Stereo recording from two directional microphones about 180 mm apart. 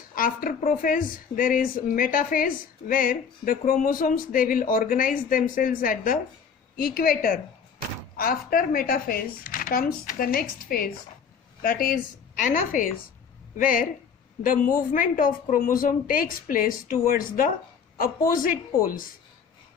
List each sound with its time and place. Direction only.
0.1 s speech: 50° left (ahead or behind)
13.6 s speech: 50° left (ahead or behind)